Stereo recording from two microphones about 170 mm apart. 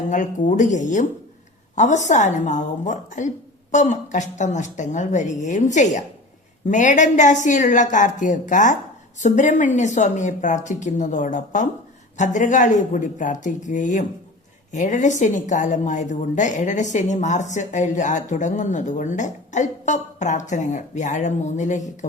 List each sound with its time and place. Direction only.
0.1 s a woman's voice: 45° left (ahead or behind)